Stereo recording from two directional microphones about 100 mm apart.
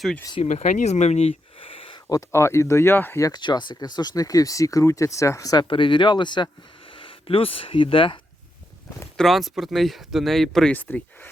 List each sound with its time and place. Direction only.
0.3 s speech: 90° left; by 2.0 s 65° left (ahead or behind)
2.0 s speech: 35° left (ahead or behind)
3.2 s speech: 45° left (ahead or behind)
5.6 s speech: 60° left (ahead or behind)
9.1 s speech: centre (ahead or behind)
10.8 s speech: 15° left (ahead or behind)